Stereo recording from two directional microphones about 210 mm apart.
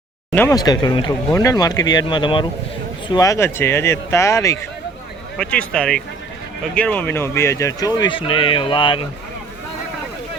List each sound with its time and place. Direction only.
0.3 s speech: 15° left (ahead or behind)